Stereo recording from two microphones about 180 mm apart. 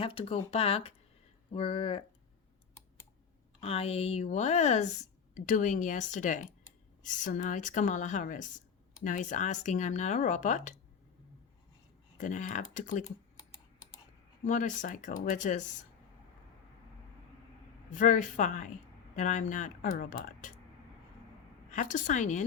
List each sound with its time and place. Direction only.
0.0 s speech: 30° left (ahead or behind)
3.6 s speech: 35° left (ahead or behind)
12.1 s speech: 45° left (ahead or behind)
14.4 s speech: 45° left (ahead or behind)
17.9 s speech: 45° left (ahead or behind)
21.7 s speech: 45° left (ahead or behind)